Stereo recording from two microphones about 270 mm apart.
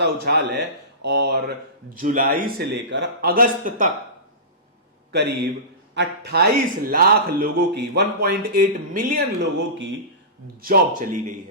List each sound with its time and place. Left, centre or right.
0.0 s a man's voice: right
5.9 s a man's voice: right
10.6 s a man's voice: right